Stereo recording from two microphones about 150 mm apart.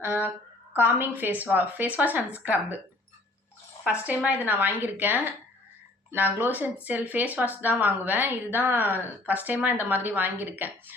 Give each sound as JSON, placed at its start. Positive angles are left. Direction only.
{"t": 0.0, "sound": "speech", "side_deg": -15}
{"t": 3.8, "sound": "speech", "side_deg": -10}